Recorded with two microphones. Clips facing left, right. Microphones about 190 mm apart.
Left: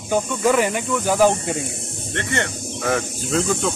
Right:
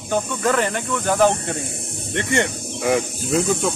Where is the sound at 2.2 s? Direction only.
15° right (ahead or behind).